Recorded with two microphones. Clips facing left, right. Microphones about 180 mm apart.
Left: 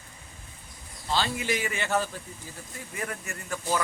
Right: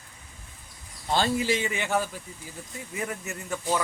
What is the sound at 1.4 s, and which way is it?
A man's voice, 25° right (ahead or behind).